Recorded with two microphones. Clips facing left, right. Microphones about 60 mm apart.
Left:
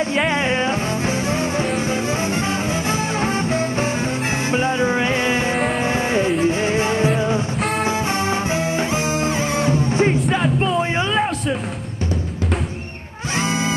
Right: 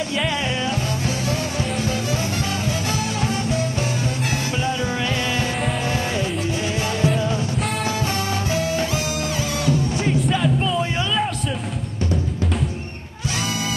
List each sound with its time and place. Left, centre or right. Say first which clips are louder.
0.0 s music: left 4 dB; left
7.5 s music: left 3 dB; centre
7.8 s music: left 3 dB; left
13.3 s music: left 5 dB; left